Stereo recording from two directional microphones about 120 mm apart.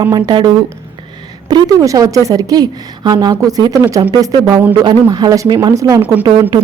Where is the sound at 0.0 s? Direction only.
35° right (ahead or behind).